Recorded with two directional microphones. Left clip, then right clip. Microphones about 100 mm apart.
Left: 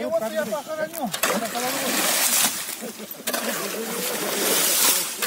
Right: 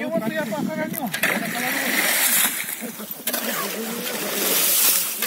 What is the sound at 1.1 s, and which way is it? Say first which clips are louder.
Speech: right 3 dB; centre (ahead or behind).